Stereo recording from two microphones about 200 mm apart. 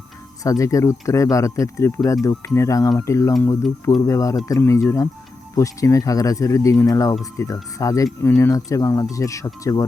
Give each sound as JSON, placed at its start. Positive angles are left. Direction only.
{"t": 0.4, "sound": "speech", "side_deg": 15}